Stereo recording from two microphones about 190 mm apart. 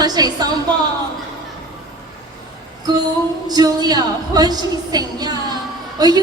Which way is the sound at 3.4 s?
20° right (ahead or behind).